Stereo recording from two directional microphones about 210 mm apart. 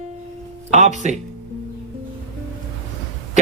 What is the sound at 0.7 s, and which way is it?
Speech, 35° right (ahead or behind).